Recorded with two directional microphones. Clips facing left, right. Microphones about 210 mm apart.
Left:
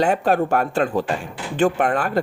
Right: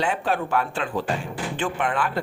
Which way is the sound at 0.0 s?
45° left (ahead or behind).